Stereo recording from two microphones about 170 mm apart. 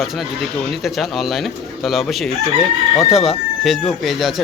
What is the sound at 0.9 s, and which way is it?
Speech, centre (ahead or behind).